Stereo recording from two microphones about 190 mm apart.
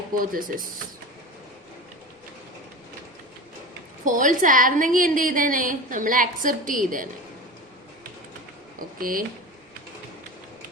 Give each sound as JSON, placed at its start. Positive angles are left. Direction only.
{"t": 0.2, "sound": "a woman's voice", "side_deg": -45}
{"t": 4.0, "sound": "a woman's voice", "side_deg": -45}
{"t": 9.0, "sound": "a woman's voice", "side_deg": -50}